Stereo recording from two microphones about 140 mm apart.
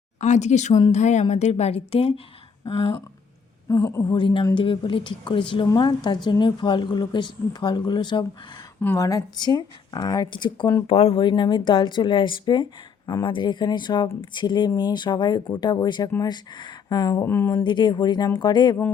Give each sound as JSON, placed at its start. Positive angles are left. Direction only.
{"t": 0.2, "sound": "a woman's voice", "side_deg": 55}
{"t": 3.7, "sound": "speech", "side_deg": 20}
{"t": 4.1, "sound": "speech", "side_deg": 35}
{"t": 8.8, "sound": "speech", "side_deg": 20}
{"t": 17.5, "sound": "speech", "side_deg": 35}